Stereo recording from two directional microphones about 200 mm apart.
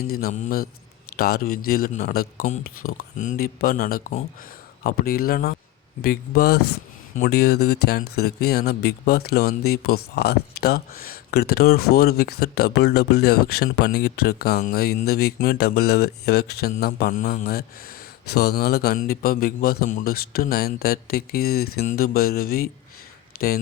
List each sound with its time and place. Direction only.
0.1 s speech: 45° left (ahead or behind)